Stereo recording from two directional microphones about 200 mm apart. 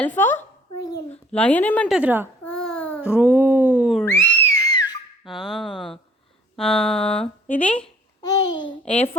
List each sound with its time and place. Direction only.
0.0 s a woman's voice: 10° left (ahead or behind)
2.0 s a child's voice: 10° right (ahead or behind)
2.4 s child singing: 5° left (ahead or behind)
3.0 s a sound: 5° right (ahead or behind)
4.0 s screaming: 10° left (ahead or behind)
5.2 s a woman's voice: centre (ahead or behind)
8.2 s babbling: 20° left (ahead or behind)
8.9 s a woman's voice: 30° left (ahead or behind)